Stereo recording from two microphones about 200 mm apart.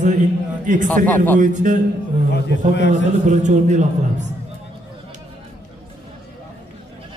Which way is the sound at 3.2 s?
35° right (ahead or behind).